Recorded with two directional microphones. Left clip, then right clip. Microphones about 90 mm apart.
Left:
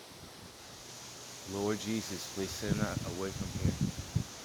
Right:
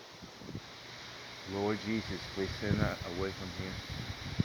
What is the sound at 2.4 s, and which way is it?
Speech, 5° left (ahead or behind).